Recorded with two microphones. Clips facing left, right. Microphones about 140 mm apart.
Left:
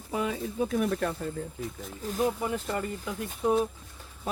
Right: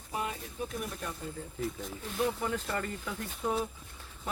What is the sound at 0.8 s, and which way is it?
Speech, 75° left (ahead or behind).